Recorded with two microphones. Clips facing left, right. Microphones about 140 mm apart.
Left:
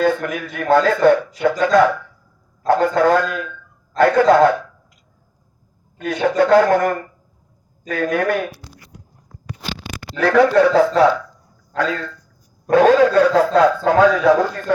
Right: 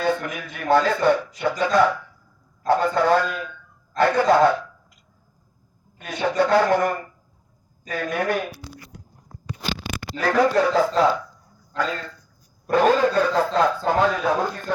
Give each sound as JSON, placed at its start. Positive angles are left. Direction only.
{"t": 0.0, "sound": "a man's voice", "side_deg": 50}
{"t": 6.0, "sound": "a man's voice", "side_deg": 55}
{"t": 10.2, "sound": "speech", "side_deg": 70}
{"t": 12.7, "sound": "a man's voice", "side_deg": 90}
{"t": 13.1, "sound": "speech", "side_deg": 80}
{"t": 13.8, "sound": "a man's voice", "side_deg": 90}